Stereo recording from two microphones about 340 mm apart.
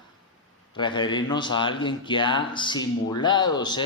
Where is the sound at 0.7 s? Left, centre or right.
Centre.